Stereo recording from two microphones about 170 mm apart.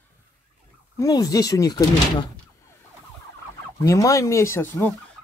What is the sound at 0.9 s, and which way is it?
Speech, 20° left (ahead or behind).